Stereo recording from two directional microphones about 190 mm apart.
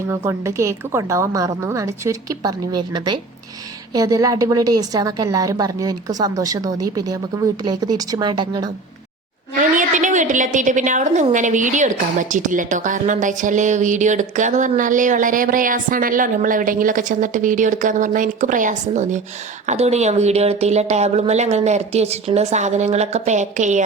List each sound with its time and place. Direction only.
0.1 s a woman's voice: 15° right (ahead or behind)
9.7 s a woman's voice: 40° right (ahead or behind)